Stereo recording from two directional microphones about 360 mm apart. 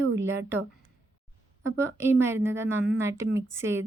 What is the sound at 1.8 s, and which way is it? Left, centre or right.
A woman's voice, centre.